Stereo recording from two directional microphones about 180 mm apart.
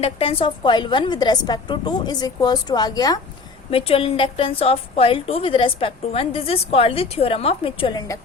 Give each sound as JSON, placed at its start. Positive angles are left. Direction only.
{"t": 0.0, "sound": "a woman's voice", "side_deg": 30}
{"t": 3.7, "sound": "a woman's voice", "side_deg": 30}